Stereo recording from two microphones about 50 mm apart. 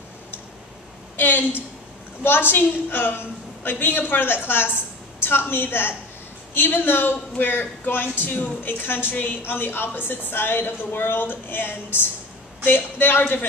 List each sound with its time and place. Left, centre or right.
1.1 s a sound: left
2.2 s a man's voice: left
9.4 s a man's voice: left